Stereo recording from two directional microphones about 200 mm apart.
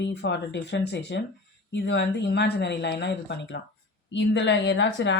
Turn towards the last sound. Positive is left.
turn(degrees=65)  # may be behind; listen again after turning